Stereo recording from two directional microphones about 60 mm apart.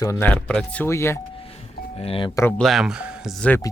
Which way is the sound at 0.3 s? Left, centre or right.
Centre.